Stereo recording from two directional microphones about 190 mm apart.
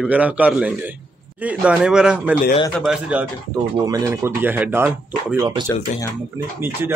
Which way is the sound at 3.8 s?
20° right (ahead or behind).